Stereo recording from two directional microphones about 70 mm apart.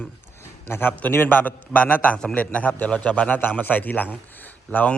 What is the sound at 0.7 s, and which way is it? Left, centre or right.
A man's voice, left.